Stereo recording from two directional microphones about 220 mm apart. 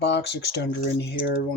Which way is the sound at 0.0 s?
50° left (ahead or behind).